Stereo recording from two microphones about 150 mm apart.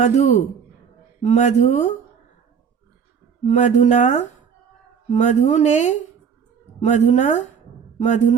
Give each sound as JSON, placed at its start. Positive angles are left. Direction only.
{"t": 0.0, "sound": "speech", "side_deg": 50}
{"t": 3.4, "sound": "speech", "side_deg": 50}